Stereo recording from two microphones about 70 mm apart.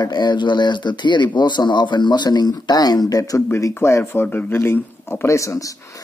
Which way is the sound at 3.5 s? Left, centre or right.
Left.